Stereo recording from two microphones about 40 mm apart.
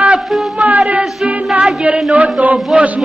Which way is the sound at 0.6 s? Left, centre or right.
Right.